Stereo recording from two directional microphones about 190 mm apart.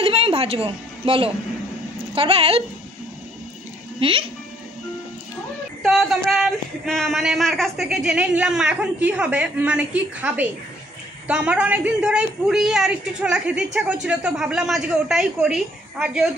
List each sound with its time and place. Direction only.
0.0 s a woman's voice: 30° right (ahead or behind)
4.0 s a woman's voice: 30° right (ahead or behind)
5.8 s speech: centre (ahead or behind)